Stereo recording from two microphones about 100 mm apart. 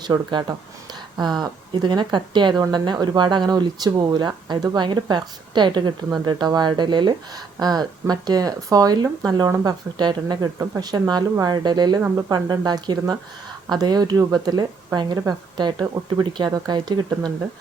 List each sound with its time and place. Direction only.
0.0 s a woman's voice: 45° right (ahead or behind)
11.9 s speech: 25° right (ahead or behind)
12.3 s a woman's voice: 40° right (ahead or behind)